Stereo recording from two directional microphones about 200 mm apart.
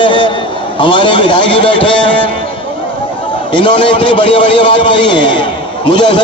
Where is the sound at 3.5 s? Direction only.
25° left (ahead or behind).